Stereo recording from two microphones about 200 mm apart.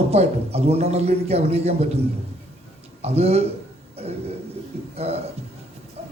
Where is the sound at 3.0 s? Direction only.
30° right (ahead or behind).